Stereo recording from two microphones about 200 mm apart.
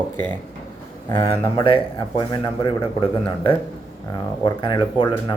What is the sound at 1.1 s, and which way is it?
Speech, 25° left (ahead or behind).